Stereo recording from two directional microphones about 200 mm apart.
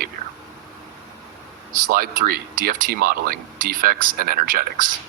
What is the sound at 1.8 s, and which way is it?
Speech, 50° right (ahead or behind).